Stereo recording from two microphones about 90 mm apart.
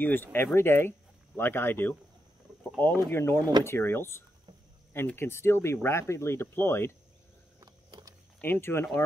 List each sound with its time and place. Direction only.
0.0 s speech: 25° left (ahead or behind)
8.4 s speech: 25° left (ahead or behind)